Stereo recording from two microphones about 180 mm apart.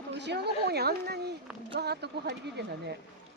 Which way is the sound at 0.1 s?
70° right (ahead or behind).